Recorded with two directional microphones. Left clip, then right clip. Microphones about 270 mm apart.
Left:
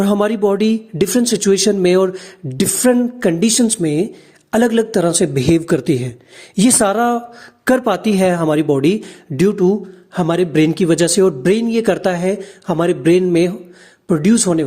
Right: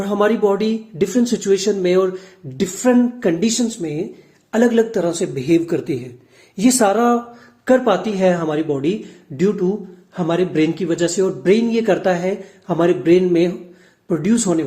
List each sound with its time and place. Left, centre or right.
0.0 s speech: left